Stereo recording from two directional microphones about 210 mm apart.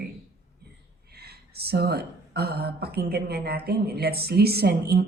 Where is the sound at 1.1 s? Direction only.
50° right (ahead or behind).